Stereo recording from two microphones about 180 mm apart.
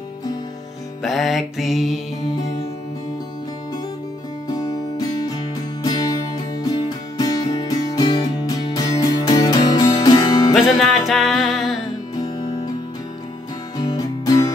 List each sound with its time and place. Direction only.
1.0 s music: centre (ahead or behind)
4.6 s music: 20° left (ahead or behind)
10.5 s music: centre (ahead or behind)
12.2 s music: 25° left (ahead or behind)
13.8 s music: 20° left (ahead or behind)